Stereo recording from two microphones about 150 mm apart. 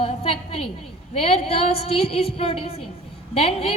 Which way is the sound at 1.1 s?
45° left (ahead or behind).